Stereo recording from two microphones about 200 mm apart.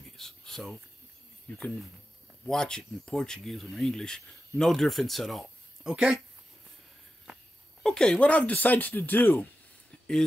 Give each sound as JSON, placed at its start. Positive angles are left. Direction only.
{"t": 0.2, "sound": "a sound", "side_deg": 0}
{"t": 2.4, "sound": "speech", "side_deg": 5}
{"t": 7.8, "sound": "speech", "side_deg": 5}